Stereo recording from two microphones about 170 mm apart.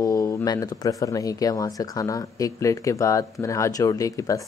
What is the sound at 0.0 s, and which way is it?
Speech, 20° left (ahead or behind).